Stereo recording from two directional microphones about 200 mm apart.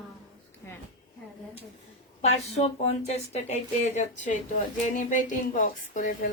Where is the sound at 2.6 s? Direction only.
30° left (ahead or behind).